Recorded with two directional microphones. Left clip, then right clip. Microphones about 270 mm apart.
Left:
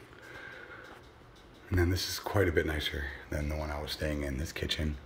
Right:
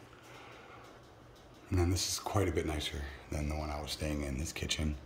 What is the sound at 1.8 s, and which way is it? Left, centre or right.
Speech, centre.